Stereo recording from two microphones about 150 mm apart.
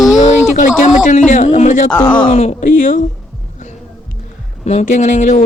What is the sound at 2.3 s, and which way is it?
Speech, 50° left (ahead or behind).